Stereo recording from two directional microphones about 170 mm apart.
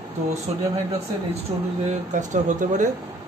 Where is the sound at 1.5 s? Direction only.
30° right (ahead or behind).